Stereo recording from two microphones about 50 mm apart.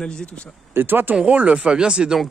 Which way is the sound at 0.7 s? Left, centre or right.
Right.